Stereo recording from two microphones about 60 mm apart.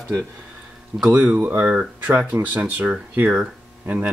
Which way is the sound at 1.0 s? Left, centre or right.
Right.